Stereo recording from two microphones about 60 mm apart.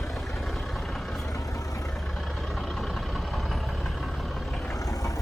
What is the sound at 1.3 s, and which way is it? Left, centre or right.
Vehicle, left.